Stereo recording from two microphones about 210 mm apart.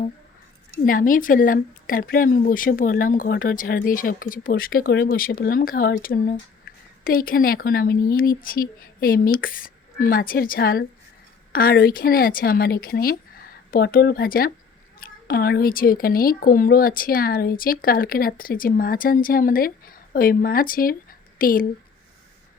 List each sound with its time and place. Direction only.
0.7 s speech: 40° left (ahead or behind)